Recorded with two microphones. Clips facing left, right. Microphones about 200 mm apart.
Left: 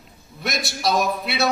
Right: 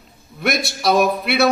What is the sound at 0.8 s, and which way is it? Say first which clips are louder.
Speech: right 5 dB; 60° right (ahead or behind).